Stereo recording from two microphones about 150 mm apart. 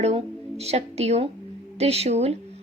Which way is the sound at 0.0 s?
45° right (ahead or behind).